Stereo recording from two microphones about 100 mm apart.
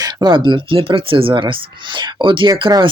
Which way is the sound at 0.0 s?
45° right (ahead or behind).